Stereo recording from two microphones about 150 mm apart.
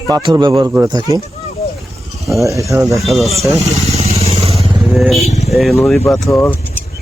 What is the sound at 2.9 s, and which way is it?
Speech, centre (ahead or behind).